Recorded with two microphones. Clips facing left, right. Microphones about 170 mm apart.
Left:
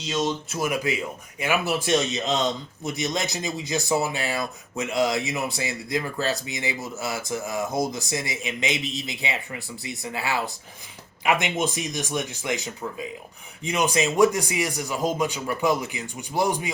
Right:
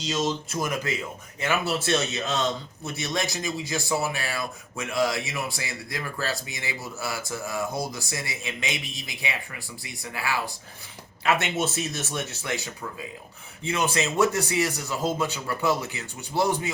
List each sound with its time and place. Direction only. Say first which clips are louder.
0.0 s a man's voice: left 1 dB; centre (ahead or behind)